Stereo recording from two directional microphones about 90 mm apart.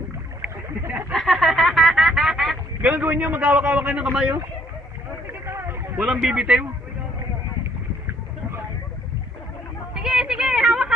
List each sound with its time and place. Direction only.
0.4 s boat: 20° right (ahead or behind)
1.1 s a sound: centre (ahead or behind)
2.8 s a man's voice: 15° right (ahead or behind)
5.3 s a sound: 25° right (ahead or behind)
6.0 s a man's voice: 10° right (ahead or behind)
9.9 s a man's voice: 5° right (ahead or behind)